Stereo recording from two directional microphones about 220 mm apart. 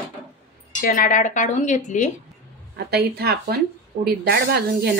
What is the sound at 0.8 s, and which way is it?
Speech, 40° left (ahead or behind).